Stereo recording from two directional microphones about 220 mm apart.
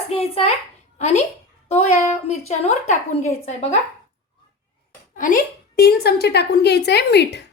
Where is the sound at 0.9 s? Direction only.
30° left (ahead or behind).